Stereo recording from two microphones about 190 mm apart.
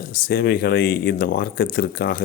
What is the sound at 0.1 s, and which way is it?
A man's voice, 50° left (ahead or behind).